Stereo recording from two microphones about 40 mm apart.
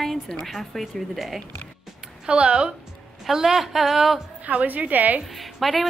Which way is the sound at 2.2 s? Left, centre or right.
Right.